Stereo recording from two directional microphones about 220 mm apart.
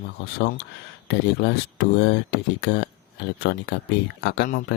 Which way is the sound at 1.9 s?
50° left (ahead or behind).